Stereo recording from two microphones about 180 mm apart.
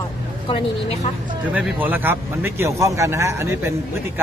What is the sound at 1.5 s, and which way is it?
A man's voice, 10° right (ahead or behind).